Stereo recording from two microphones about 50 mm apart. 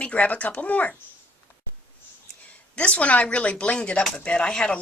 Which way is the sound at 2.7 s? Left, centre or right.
Left.